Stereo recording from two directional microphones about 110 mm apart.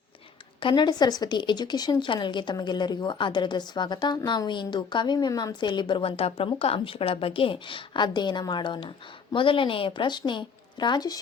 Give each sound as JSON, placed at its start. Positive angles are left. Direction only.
{"t": 0.6, "sound": "speech", "side_deg": 45}